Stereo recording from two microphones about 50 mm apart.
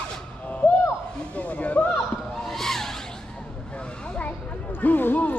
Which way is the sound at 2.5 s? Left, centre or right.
Centre.